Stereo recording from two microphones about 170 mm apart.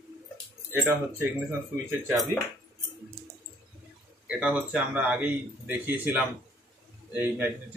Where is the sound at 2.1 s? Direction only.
Centre (ahead or behind).